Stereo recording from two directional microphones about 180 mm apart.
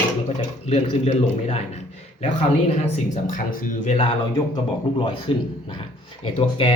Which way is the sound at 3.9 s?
25° left (ahead or behind).